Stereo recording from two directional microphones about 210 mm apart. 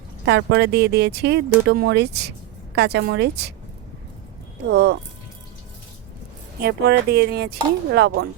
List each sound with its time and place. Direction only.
0.3 s speech: 50° right (ahead or behind)
4.7 s speech: 50° right (ahead or behind)
6.6 s speech: 50° right (ahead or behind)